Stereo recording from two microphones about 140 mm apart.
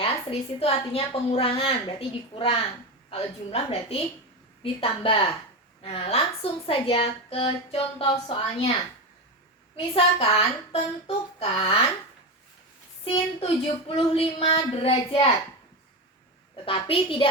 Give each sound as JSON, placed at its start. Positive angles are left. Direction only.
{"t": 0.0, "sound": "a woman's voice", "side_deg": 40}
{"t": 9.7, "sound": "a woman's voice", "side_deg": 40}
{"t": 13.4, "sound": "speech", "side_deg": 45}
{"t": 16.6, "sound": "a woman's voice", "side_deg": 40}